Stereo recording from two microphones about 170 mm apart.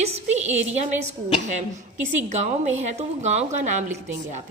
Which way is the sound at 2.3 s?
40° right (ahead or behind).